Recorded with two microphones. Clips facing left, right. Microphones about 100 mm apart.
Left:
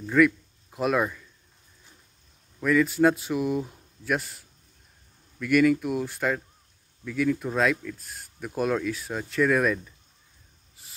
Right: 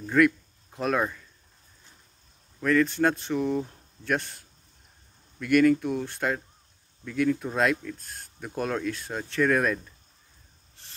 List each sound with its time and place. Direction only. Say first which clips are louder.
0.0 s speech: left 1 dB; centre (ahead or behind)
2.6 s speech: left 2 dB; 5° left (ahead or behind)
10.8 s a sound: right 1 dB; 5° left (ahead or behind)